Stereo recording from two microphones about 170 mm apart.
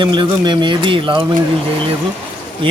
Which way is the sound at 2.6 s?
30° right (ahead or behind).